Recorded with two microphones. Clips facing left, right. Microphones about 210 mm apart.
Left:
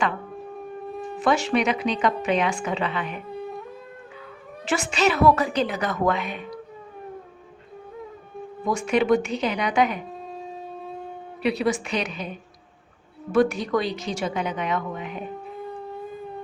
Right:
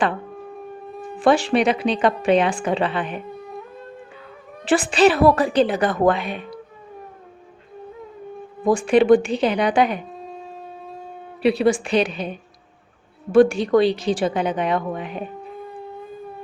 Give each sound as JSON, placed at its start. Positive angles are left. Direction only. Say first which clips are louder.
{"t": 1.2, "sound": "a woman's voice", "louder": "right 5 dB", "side_deg": -30}
{"t": 4.6, "sound": "a woman's voice", "louder": "right 7 dB", "side_deg": -30}
{"t": 8.6, "sound": "a woman's voice", "louder": "right 6 dB", "side_deg": -30}
{"t": 10.2, "sound": "shofar", "louder": "right 1 dB", "side_deg": 0}
{"t": 11.4, "sound": "a woman's voice", "louder": "right 6 dB", "side_deg": -30}
{"t": 13.3, "sound": "a woman's voice", "louder": "right 6 dB", "side_deg": -30}